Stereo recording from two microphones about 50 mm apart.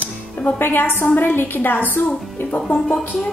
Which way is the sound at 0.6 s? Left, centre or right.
Left.